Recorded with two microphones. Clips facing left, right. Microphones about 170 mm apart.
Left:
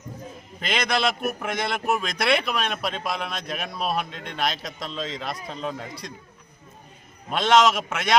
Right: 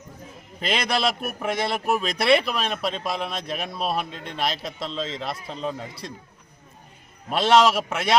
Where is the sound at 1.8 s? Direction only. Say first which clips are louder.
Right 1 dB; 30° right (ahead or behind).